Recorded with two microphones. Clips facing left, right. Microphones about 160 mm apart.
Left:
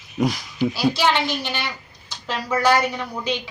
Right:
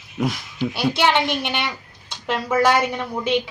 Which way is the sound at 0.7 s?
25° right (ahead or behind).